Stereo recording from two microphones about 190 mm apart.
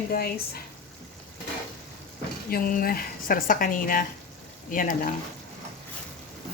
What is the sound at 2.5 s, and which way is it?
Speech, 50° left (ahead or behind).